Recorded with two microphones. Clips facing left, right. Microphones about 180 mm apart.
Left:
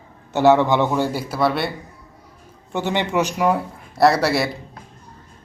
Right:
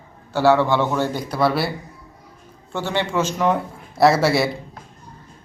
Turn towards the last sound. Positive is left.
turn(degrees=0)  # may be behind; listen again after turning